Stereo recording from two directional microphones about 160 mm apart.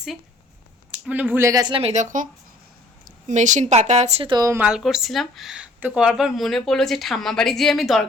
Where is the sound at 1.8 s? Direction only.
45° right (ahead or behind).